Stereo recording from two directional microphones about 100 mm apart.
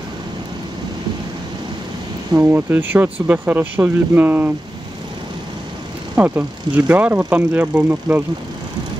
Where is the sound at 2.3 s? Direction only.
15° right (ahead or behind).